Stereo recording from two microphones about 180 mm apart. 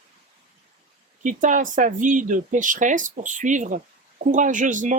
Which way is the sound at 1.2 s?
45° right (ahead or behind).